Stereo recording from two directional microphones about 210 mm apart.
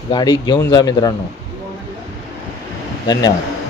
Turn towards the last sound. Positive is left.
turn(degrees=20)  # may be behind; listen again after turning